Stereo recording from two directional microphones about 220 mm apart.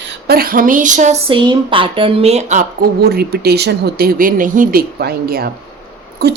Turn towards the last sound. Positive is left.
turn(degrees=-45)  # may be behind; listen again after turning